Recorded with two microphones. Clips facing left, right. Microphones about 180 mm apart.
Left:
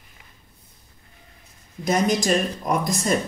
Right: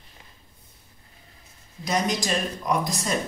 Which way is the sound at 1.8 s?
50° left (ahead or behind).